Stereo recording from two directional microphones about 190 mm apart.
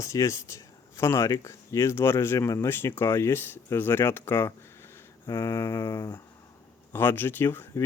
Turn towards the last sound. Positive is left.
turn(degrees=10)  # may be behind; listen again after turning